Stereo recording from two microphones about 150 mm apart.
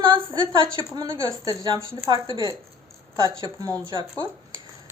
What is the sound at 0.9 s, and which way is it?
Speech, 25° right (ahead or behind).